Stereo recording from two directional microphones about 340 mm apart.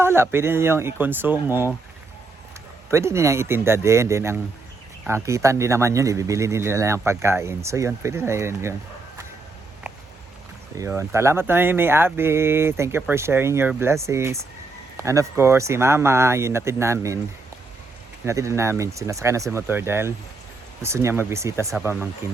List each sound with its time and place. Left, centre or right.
0.0 s speech: centre
2.9 s speech: centre
10.8 s speech: centre
18.3 s speech: centre